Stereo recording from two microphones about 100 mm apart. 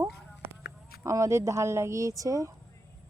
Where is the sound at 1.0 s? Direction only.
30° right (ahead or behind).